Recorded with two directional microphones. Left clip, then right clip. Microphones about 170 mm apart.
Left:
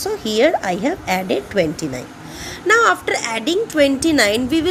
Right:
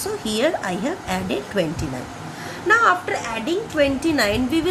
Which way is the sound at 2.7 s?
50° left (ahead or behind).